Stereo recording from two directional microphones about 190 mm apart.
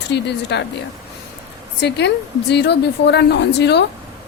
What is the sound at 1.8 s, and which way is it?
Speech, 65° left (ahead or behind).